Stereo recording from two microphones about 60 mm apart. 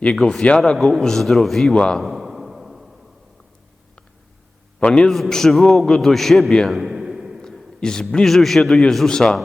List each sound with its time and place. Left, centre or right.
0.0 s speech: centre
0.8 s a man's voice: centre
1.7 s speech: centre
2.0 s a sound: centre
4.8 s speech: centre
5.1 s a man's voice: centre
6.7 s a sound: centre
7.4 s a sound: centre
8.1 s a man's voice: centre